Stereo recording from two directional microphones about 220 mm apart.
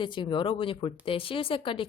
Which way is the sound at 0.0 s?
20° left (ahead or behind).